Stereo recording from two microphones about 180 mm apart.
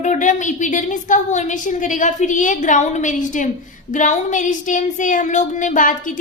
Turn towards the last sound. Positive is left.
turn(degrees=45)  # may be behind; listen again after turning